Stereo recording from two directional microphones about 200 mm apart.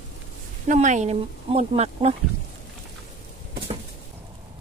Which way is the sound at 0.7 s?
35° right (ahead or behind).